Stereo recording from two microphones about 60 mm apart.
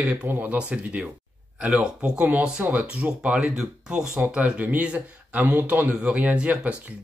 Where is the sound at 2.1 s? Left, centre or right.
Right.